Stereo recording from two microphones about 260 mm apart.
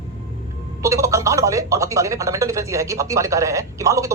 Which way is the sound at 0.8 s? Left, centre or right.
Centre.